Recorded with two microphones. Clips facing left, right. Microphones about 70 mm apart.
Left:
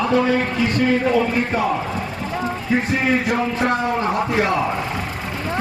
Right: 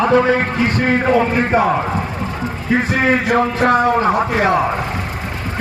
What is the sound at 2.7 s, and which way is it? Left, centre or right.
A man's voice, right.